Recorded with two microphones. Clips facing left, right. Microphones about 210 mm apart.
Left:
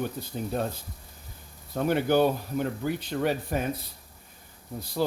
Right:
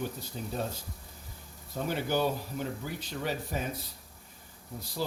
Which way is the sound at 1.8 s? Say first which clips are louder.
Left 7 dB; 60° left (ahead or behind).